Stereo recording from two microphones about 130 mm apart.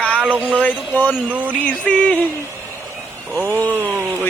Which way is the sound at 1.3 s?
15° right (ahead or behind).